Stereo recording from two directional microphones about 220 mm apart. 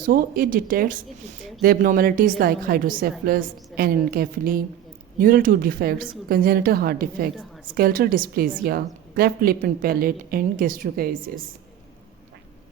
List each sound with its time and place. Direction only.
0.0 s a woman's voice: 40° right (ahead or behind)